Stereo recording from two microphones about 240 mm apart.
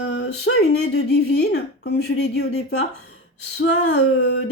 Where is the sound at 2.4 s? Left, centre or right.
Left.